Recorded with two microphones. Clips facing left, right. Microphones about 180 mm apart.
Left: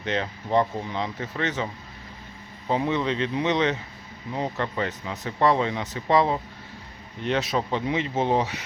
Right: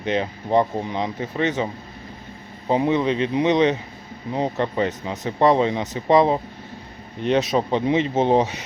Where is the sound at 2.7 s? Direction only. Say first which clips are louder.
Right 5 dB; 15° right (ahead or behind).